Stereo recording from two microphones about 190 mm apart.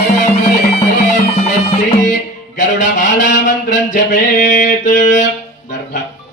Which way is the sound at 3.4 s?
40° left (ahead or behind).